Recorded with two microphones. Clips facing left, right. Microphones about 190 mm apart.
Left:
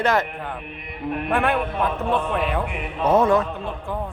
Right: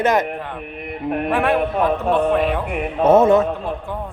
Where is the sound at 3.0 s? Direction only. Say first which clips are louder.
Right 5 dB; 25° right (ahead or behind).